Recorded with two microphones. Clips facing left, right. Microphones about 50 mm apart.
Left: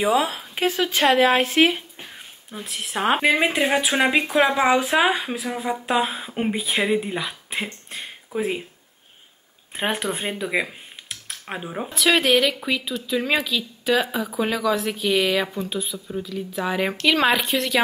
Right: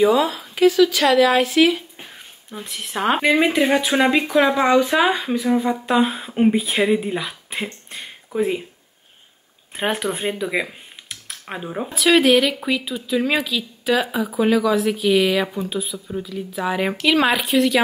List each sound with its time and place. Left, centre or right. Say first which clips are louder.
0.0 s speech: right 4 dB; left
2.0 s speech: right 1 dB; centre
4.7 s speech: right 3 dB; left
5.0 s speech: right 3 dB; centre
9.8 s speech: right 2 dB; centre